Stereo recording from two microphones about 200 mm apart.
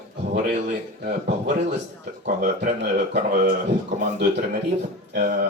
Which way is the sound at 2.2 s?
45° right (ahead or behind).